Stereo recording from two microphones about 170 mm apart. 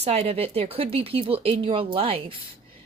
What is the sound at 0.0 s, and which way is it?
A woman's voice, 35° right (ahead or behind).